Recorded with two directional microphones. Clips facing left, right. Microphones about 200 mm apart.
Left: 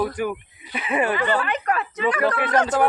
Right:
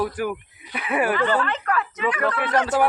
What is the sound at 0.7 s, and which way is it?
Speech, 20° left (ahead or behind).